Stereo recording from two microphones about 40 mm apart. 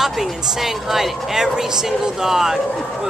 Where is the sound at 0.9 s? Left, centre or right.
Centre.